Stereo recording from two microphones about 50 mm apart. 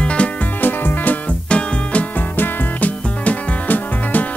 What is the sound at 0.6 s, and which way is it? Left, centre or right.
Music, left.